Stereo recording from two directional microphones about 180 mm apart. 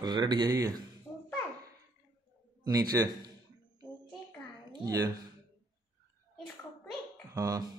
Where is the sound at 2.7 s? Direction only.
20° right (ahead or behind).